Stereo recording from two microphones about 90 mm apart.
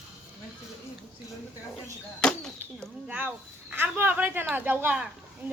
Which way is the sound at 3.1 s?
15° right (ahead or behind).